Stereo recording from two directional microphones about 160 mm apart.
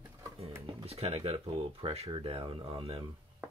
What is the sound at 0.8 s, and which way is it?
Speech, 40° right (ahead or behind).